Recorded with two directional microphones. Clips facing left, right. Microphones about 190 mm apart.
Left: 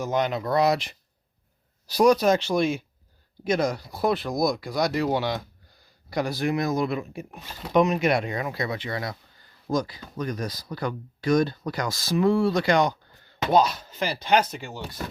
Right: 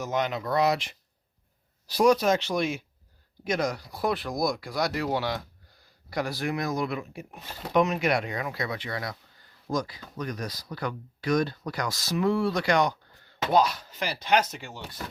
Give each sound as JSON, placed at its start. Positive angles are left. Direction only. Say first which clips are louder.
{"t": 0.0, "sound": "speech", "louder": "left 3 dB", "side_deg": 35}